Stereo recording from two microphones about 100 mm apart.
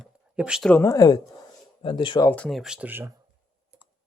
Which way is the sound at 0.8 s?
35° left (ahead or behind).